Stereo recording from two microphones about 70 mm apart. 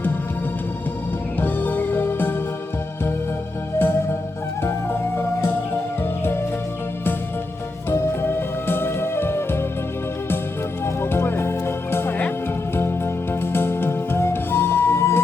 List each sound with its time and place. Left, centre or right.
1.4 s music: left
3.8 s music: left
7.9 s music: left
10.8 s music: left
13.4 s music: left